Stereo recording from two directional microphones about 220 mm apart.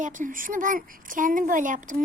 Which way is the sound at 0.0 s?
35° right (ahead or behind).